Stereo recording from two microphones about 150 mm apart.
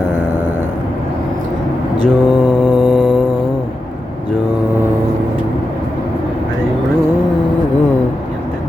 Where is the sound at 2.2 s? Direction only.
30° left (ahead or behind).